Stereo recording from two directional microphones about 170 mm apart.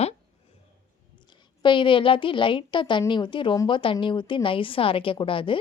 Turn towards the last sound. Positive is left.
turn(degrees=30)  # may be behind; listen again after turning